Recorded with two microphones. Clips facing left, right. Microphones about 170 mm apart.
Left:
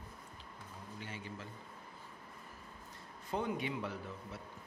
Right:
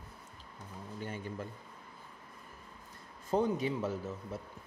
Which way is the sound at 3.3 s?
40° right (ahead or behind).